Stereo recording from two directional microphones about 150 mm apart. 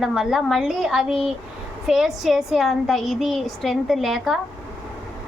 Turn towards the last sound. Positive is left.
turn(degrees=0)  # may be behind; listen again after turning